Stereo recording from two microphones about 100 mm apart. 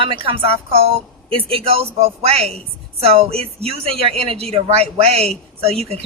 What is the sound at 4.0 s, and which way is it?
A woman's voice, 75° right (ahead or behind).